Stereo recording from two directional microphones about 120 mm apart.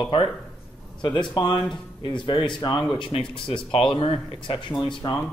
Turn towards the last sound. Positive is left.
turn(degrees=40)  # may be behind; listen again after turning